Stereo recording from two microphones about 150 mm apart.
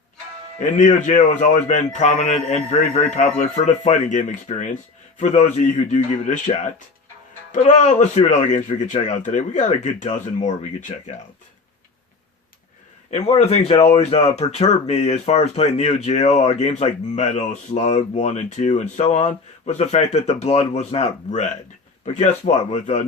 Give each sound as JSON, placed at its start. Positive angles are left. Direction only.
{"t": 0.6, "sound": "speech", "side_deg": 55}
{"t": 13.1, "sound": "speech", "side_deg": 45}